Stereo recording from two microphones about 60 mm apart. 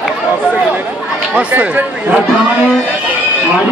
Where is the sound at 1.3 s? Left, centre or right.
Right.